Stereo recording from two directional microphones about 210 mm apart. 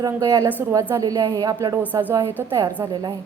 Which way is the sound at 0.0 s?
15° right (ahead or behind).